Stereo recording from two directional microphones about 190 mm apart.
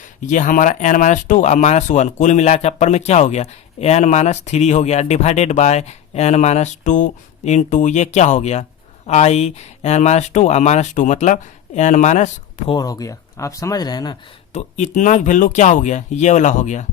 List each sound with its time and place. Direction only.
0.3 s speech: 40° left (ahead or behind)
12.7 s speech: 20° left (ahead or behind)
14.5 s speech: 40° left (ahead or behind)